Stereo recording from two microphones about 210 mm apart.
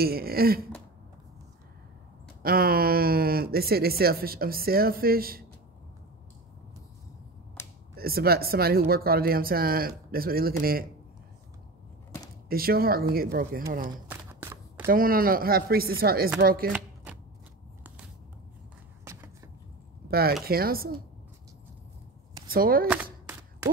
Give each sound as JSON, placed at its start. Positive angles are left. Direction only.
{"t": 0.0, "sound": "speech", "side_deg": -45}
{"t": 2.4, "sound": "speech", "side_deg": -45}
{"t": 7.6, "sound": "finger snapping", "side_deg": 10}
{"t": 7.9, "sound": "speech", "side_deg": -45}
{"t": 12.4, "sound": "speech", "side_deg": -45}
{"t": 14.0, "sound": "a sound", "side_deg": -10}
{"t": 14.9, "sound": "speech", "side_deg": -45}
{"t": 19.0, "sound": "a sound", "side_deg": -15}
{"t": 20.1, "sound": "speech", "side_deg": -45}
{"t": 22.5, "sound": "speech", "side_deg": -45}